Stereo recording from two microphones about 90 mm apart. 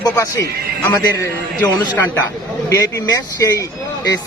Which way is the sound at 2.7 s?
40° left (ahead or behind).